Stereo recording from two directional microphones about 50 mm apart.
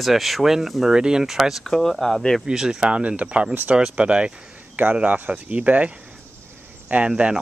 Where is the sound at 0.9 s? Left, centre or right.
Centre.